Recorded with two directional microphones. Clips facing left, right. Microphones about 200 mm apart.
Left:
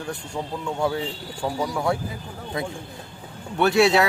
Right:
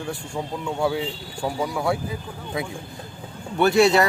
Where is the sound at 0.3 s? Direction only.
5° right (ahead or behind).